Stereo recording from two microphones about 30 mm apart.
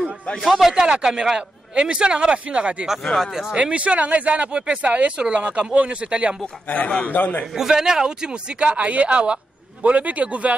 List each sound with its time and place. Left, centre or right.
0.4 s speech: centre
0.7 s speech: right
3.2 s speech: centre
3.5 s speech: right
4.8 s speech: right
6.4 s a man's voice: left
7.1 s a man's voice: left
7.5 s speech: centre
8.5 s speech: right